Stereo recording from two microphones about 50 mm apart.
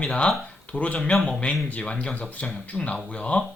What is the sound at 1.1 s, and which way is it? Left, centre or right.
Speech, centre.